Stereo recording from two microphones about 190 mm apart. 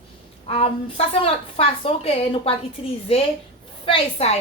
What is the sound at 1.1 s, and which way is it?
A woman's voice, 30° left (ahead or behind).